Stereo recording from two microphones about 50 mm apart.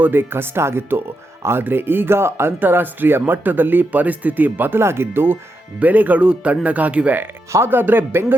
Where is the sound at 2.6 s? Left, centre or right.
Right.